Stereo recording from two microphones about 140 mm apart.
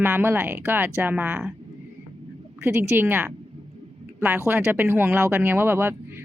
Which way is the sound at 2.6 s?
15° right (ahead or behind).